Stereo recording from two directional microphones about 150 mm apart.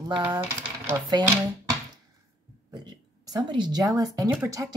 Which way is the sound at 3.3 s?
30° right (ahead or behind).